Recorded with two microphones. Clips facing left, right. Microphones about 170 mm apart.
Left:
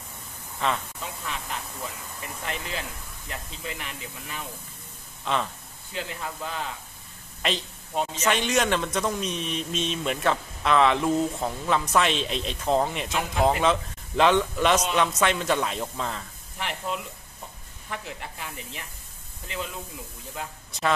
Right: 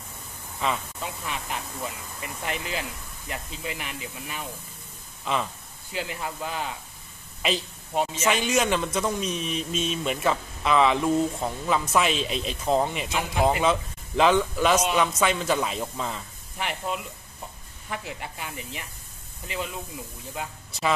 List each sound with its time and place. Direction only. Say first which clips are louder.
0.6 s a man's voice: even; 5° right (ahead or behind)
2.4 s a man's voice: right 2 dB; 10° right (ahead or behind)